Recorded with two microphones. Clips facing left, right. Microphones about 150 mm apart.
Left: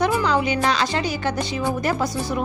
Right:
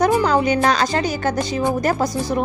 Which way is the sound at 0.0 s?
45° right (ahead or behind).